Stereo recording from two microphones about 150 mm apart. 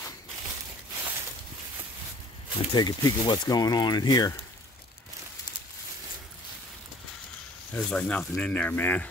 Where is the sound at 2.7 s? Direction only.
25° left (ahead or behind).